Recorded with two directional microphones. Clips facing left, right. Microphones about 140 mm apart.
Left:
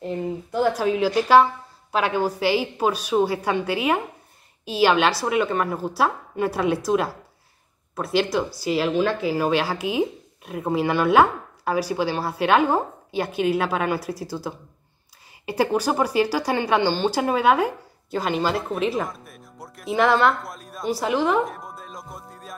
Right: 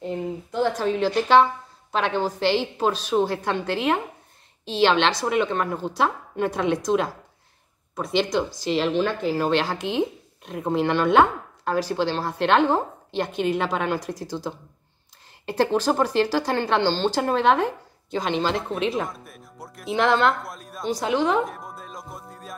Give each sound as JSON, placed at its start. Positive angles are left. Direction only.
{"t": 0.0, "sound": "speech", "side_deg": 5}